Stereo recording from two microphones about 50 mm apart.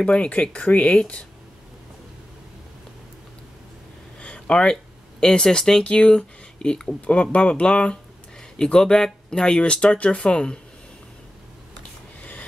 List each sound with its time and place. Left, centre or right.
0.0 s speech: left
4.2 s a sound: left
5.2 s speech: centre
12.2 s vehicle: left